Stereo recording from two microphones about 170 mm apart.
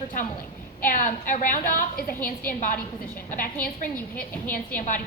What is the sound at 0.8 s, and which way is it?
A woman's voice, 50° left (ahead or behind).